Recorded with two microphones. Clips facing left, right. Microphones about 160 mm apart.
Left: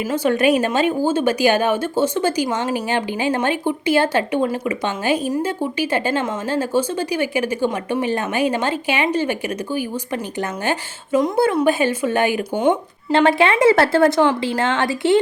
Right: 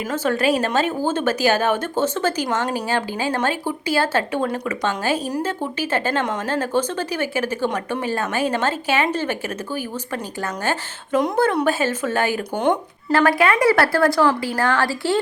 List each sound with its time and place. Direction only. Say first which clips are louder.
0.1 s speech: left 3 dB; 15° left (ahead or behind)
11.1 s speech: left 2 dB; 10° left (ahead or behind)